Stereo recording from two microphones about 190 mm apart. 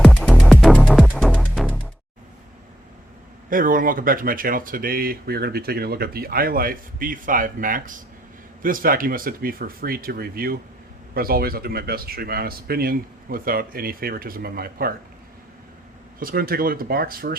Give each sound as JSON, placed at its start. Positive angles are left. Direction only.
{"t": 0.0, "sound": "music", "side_deg": 5}
{"t": 3.5, "sound": "speech", "side_deg": -45}
{"t": 16.2, "sound": "speech", "side_deg": -50}